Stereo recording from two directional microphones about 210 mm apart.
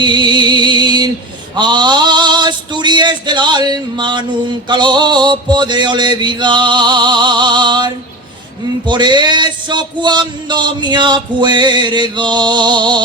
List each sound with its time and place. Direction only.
0.0 s music: 20° right (ahead or behind)
1.5 s male singing: 20° right (ahead or behind)
4.7 s speech: 20° right (ahead or behind)
8.9 s speech: 20° right (ahead or behind)